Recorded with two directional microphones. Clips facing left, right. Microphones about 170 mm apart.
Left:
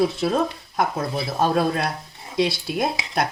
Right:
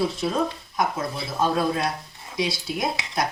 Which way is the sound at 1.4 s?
65° left (ahead or behind).